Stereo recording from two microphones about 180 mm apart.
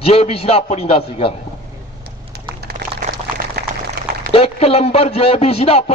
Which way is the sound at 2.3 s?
55° right (ahead or behind).